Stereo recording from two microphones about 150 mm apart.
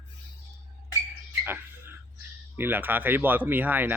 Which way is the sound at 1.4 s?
15° right (ahead or behind).